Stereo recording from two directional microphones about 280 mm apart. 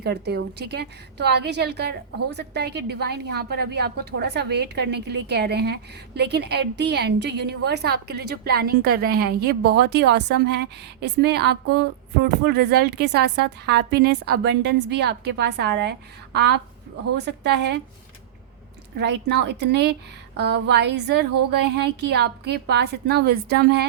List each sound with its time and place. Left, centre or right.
0.0 s a woman's voice: right
18.9 s a woman's voice: right